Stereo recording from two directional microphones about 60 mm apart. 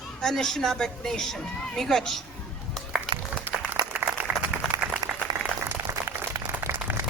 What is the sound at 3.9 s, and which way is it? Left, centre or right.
Applause, right.